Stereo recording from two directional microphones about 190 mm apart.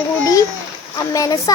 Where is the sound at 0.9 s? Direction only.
20° left (ahead or behind).